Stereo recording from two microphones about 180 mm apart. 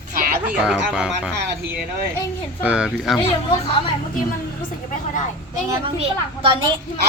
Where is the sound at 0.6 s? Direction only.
5° right (ahead or behind).